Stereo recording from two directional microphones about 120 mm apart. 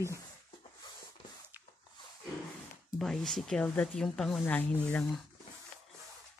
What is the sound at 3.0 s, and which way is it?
Speech, 5° left (ahead or behind).